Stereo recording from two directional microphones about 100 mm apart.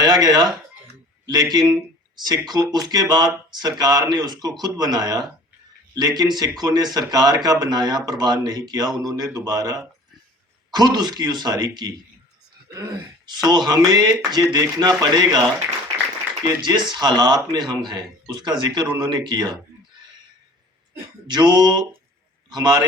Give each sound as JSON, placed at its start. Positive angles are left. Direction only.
{"t": 0.0, "sound": "a man's voice", "side_deg": -40}
{"t": 21.2, "sound": "speech", "side_deg": -45}